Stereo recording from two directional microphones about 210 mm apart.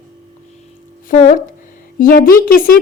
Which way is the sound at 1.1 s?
40° left (ahead or behind).